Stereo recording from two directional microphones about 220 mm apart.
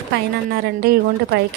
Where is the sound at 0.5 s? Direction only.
45° right (ahead or behind).